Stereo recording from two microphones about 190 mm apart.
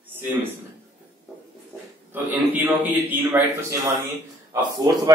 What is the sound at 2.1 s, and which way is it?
A man's voice, 10° right (ahead or behind).